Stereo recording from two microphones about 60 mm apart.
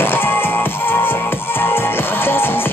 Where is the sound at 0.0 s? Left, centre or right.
Left.